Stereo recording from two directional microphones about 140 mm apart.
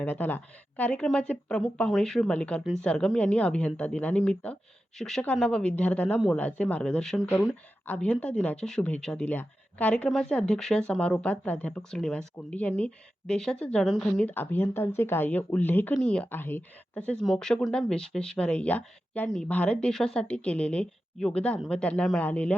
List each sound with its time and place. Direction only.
0.0 s speech: 10° left (ahead or behind)